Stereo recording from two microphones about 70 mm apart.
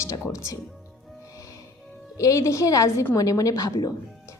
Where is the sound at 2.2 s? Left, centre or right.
Left.